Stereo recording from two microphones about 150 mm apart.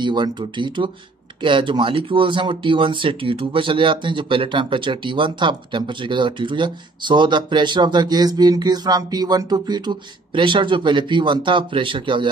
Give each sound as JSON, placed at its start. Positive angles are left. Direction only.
{"t": 0.0, "sound": "speech", "side_deg": -30}